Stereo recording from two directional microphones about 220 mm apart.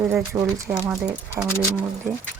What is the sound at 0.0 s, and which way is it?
Speech, 10° right (ahead or behind).